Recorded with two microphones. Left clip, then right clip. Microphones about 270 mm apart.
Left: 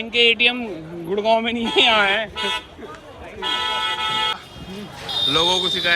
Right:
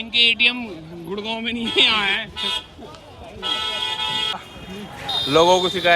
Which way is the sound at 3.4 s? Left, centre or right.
Centre.